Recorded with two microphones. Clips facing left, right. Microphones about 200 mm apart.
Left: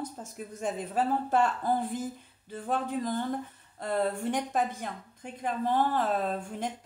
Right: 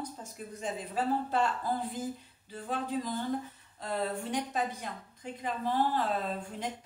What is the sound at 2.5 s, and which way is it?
A woman's voice, 50° left (ahead or behind).